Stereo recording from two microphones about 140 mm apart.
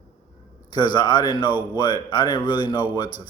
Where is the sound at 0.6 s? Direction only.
30° left (ahead or behind).